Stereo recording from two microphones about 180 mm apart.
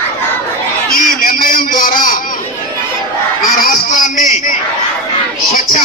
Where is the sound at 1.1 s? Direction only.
50° left (ahead or behind).